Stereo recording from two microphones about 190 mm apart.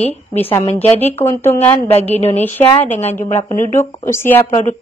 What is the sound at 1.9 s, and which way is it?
Speech, 35° left (ahead or behind).